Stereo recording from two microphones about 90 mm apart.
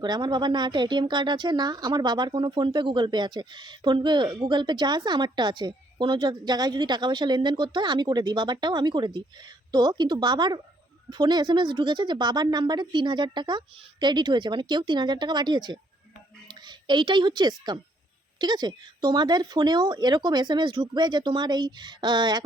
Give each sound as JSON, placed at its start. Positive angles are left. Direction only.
{"t": 0.0, "sound": "a child's voice", "side_deg": -55}